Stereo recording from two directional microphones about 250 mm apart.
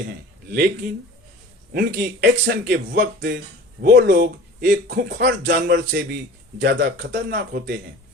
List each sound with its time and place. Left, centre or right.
1.7 s speech: right